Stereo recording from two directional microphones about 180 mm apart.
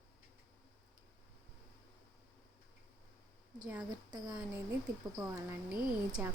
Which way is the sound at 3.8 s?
25° right (ahead or behind).